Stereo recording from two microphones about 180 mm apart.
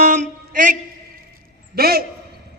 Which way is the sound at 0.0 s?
40° right (ahead or behind).